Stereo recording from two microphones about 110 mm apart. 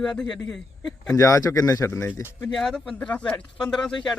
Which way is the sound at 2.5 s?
5° left (ahead or behind).